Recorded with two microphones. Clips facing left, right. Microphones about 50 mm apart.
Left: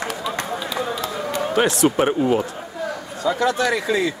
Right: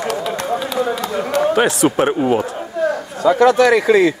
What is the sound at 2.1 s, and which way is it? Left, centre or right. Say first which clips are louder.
Speech: right 3 dB; centre.